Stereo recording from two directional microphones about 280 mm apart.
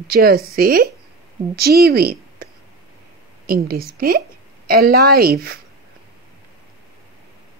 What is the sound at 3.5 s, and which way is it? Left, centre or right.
A woman's voice, right.